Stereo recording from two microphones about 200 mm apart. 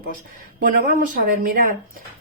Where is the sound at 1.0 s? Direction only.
45° right (ahead or behind).